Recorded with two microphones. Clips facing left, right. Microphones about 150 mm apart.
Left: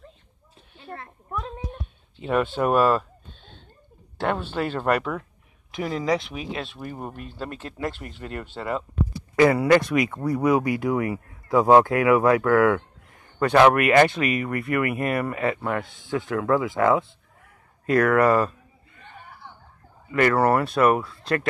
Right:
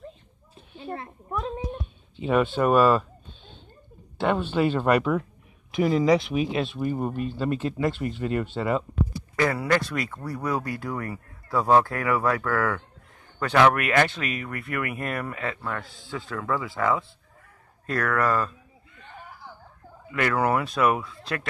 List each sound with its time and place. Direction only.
0.7 s a sound: 15° right (ahead or behind)
2.1 s speech: centre (ahead or behind)
4.2 s speech: 5° left (ahead or behind)
9.4 s speech: 10° left (ahead or behind)
20.2 s speech: centre (ahead or behind)